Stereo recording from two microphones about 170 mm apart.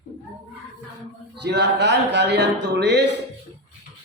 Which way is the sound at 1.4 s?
85° right.